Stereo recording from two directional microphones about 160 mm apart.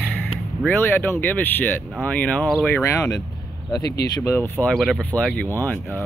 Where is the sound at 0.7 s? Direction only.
15° left (ahead or behind).